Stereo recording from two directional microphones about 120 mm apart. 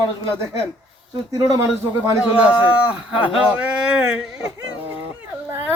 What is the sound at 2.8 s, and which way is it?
Speech, 10° right (ahead or behind).